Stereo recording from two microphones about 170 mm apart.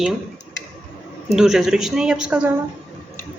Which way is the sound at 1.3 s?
5° right (ahead or behind).